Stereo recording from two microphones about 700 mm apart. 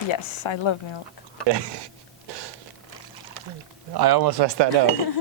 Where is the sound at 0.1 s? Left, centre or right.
Left.